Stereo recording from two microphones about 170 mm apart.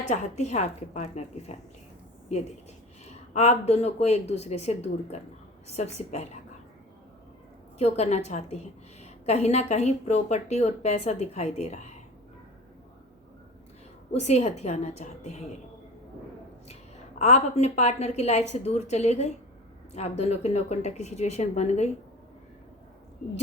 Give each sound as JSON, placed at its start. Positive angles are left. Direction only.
{"t": 0.0, "sound": "speech", "side_deg": 45}
{"t": 3.3, "sound": "speech", "side_deg": 40}
{"t": 7.8, "sound": "speech", "side_deg": 40}
{"t": 14.1, "sound": "speech", "side_deg": 40}
{"t": 17.2, "sound": "speech", "side_deg": 40}